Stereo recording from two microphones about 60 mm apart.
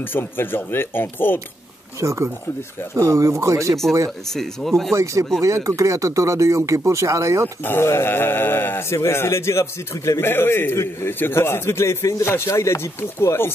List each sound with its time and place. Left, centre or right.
0.0 s speech: left
2.0 s speech: right
4.3 s speech: centre
4.9 s speech: right
7.6 s a man's voice: left
10.2 s a man's voice: left